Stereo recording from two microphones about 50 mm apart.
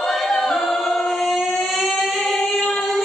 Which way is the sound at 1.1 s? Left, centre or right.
Centre.